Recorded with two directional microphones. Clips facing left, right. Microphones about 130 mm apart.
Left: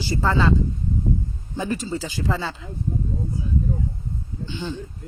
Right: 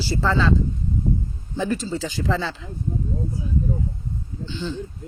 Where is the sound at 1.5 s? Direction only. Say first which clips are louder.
Right 1 dB; 10° left (ahead or behind).